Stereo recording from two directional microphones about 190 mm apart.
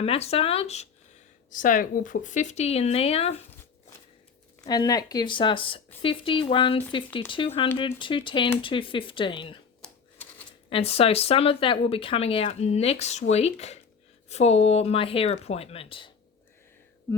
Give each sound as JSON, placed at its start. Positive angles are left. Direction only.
{"t": 0.0, "sound": "speech", "side_deg": 30}
{"t": 1.5, "sound": "speech", "side_deg": 45}
{"t": 4.6, "sound": "speech", "side_deg": 20}
{"t": 9.8, "sound": "typewriter", "side_deg": 10}
{"t": 10.7, "sound": "speech", "side_deg": 30}